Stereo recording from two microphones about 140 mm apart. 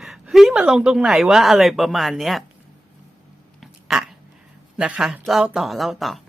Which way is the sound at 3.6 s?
5° right (ahead or behind).